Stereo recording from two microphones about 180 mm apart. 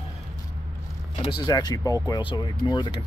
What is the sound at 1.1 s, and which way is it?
Speech, 25° left (ahead or behind).